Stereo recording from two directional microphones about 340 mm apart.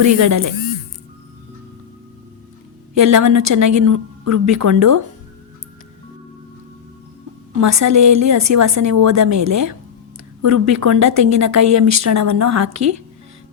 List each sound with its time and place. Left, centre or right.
0.0 s a woman's voice: right
2.9 s a woman's voice: right
7.5 s a woman's voice: right